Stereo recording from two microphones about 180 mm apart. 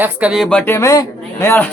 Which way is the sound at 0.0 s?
10° right (ahead or behind).